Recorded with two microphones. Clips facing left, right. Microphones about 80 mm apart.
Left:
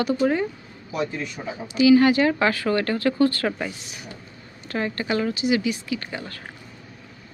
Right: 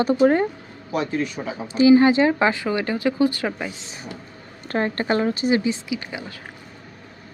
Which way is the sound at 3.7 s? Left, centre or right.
Right.